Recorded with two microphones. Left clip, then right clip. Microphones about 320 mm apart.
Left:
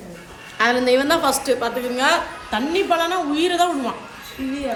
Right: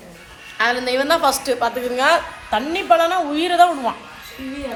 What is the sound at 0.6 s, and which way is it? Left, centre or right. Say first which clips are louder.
A woman's voice: left 2 dB; centre.